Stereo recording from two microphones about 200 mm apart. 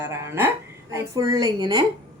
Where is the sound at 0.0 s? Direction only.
15° right (ahead or behind).